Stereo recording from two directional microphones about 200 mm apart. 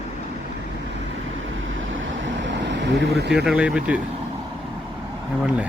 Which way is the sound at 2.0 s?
70° right (ahead or behind).